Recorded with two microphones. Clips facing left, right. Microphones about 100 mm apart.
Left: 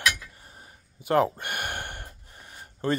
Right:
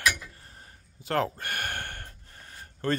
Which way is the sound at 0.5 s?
15° left (ahead or behind).